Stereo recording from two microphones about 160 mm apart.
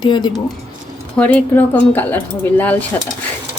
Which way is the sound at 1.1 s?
10° left (ahead or behind).